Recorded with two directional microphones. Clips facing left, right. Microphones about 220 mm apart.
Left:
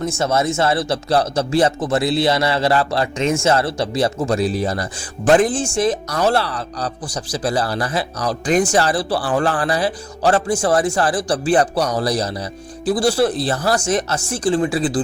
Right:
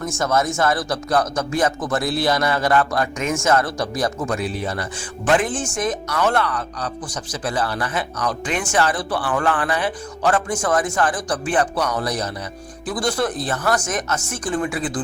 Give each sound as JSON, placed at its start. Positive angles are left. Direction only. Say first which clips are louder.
{"t": 0.2, "sound": "a man's voice", "louder": "left 1 dB", "side_deg": 25}